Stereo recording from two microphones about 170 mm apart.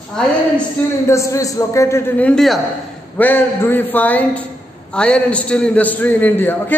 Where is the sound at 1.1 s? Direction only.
20° left (ahead or behind).